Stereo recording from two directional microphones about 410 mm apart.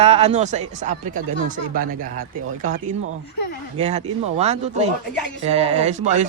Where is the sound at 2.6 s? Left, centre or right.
Centre.